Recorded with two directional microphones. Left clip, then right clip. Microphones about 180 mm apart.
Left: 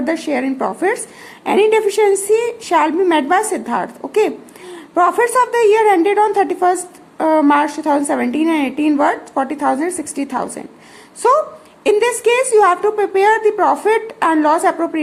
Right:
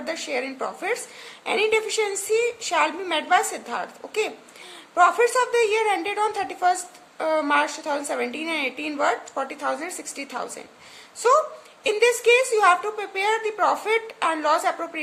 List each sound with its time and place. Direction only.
0.0 s a woman's voice: 15° left (ahead or behind)
4.7 s a sound: 15° left (ahead or behind)
5.2 s a woman's voice: 15° left (ahead or behind)